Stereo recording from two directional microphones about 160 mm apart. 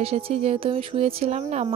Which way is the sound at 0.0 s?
40° right (ahead or behind).